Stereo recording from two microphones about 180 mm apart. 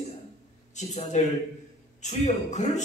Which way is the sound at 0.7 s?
40° left (ahead or behind).